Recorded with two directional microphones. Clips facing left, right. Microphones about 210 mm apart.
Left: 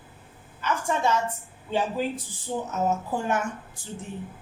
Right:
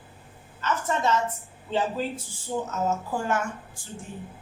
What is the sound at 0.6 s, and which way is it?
A woman's voice, 10° left (ahead or behind).